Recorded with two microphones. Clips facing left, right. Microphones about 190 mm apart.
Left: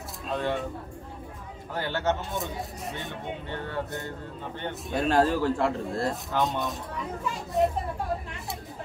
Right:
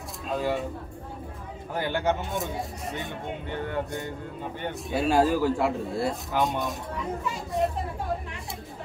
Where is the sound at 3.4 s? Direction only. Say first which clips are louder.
Right 4 dB; 15° right (ahead or behind).